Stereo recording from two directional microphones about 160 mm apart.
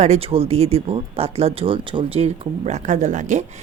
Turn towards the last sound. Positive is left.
turn(degrees=-50)  # may be behind; listen again after turning